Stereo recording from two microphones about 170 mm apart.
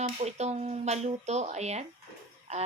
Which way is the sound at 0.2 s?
40° right (ahead or behind).